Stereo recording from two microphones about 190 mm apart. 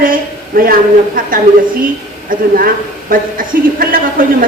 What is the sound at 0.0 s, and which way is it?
A woman's voice, 50° right (ahead or behind).